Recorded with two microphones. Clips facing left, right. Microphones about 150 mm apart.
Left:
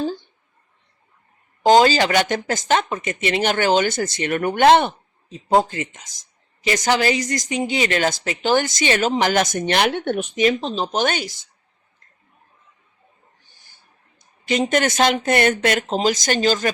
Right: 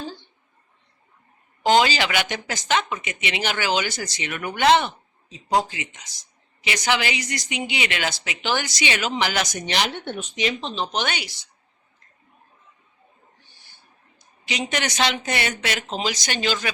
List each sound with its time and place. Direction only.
1.6 s speech: 45° left (ahead or behind)
14.2 s speech: 50° left (ahead or behind)